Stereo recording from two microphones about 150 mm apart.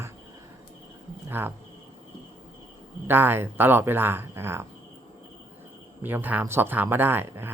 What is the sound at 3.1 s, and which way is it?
Speech, 15° right (ahead or behind).